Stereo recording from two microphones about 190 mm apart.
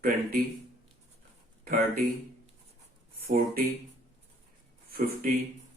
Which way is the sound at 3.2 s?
50° right (ahead or behind).